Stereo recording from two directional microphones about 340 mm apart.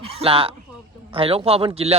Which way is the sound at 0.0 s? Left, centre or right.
Centre.